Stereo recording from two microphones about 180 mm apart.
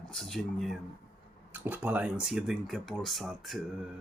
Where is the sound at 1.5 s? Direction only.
10° right (ahead or behind).